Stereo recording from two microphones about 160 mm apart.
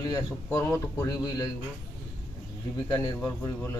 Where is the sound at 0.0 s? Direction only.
20° left (ahead or behind).